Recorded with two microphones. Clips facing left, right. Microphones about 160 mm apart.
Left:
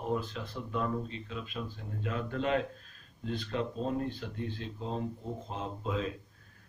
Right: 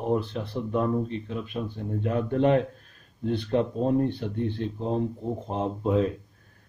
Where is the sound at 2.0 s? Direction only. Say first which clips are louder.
Right 9 dB; 55° right (ahead or behind).